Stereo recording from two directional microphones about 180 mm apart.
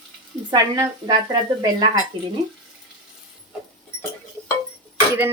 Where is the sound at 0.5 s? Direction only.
20° right (ahead or behind).